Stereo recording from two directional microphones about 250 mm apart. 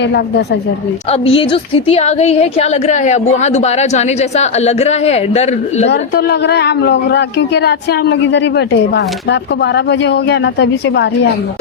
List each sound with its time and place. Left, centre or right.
0.0 s speech: left
1.1 s a woman's voice: left
5.9 s speech: left